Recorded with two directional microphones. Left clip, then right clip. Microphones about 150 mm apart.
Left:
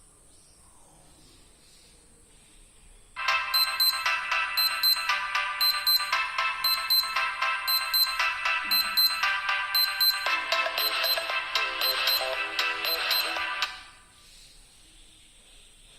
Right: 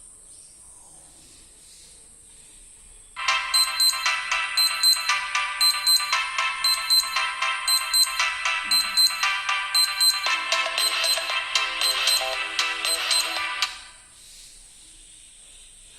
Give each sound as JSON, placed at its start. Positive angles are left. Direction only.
{"t": 3.2, "sound": "music", "side_deg": 30}